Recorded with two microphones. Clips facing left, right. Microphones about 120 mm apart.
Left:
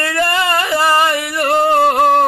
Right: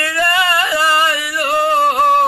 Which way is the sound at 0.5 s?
50° left (ahead or behind).